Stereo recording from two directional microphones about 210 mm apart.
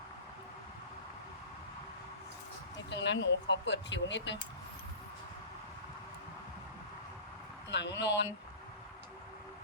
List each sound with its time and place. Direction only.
2.7 s speech: 55° left (ahead or behind)
7.7 s speech: 55° left (ahead or behind)